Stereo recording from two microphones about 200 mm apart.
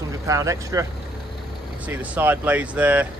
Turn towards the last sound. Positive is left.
turn(degrees=-5)  # may be behind; listen again after turning